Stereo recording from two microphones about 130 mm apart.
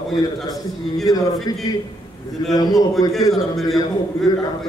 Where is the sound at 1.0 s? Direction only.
30° left (ahead or behind).